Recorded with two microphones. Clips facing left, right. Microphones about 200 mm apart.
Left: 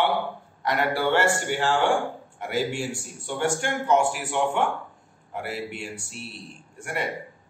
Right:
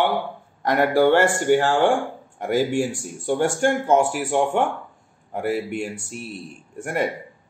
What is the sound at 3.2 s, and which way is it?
A man's voice, 50° right (ahead or behind).